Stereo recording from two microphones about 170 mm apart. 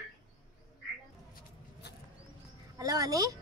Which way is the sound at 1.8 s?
75° left (ahead or behind).